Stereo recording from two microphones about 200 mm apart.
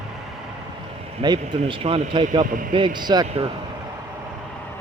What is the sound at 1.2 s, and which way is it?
A man's voice, 20° right (ahead or behind).